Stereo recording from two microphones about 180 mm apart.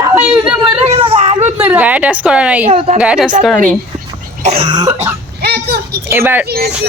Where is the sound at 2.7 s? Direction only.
30° right (ahead or behind).